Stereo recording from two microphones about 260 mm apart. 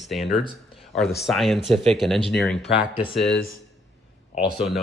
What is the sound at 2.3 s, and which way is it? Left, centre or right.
Speech, centre.